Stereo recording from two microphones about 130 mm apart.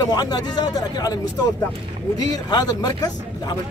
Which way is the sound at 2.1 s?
30° left (ahead or behind).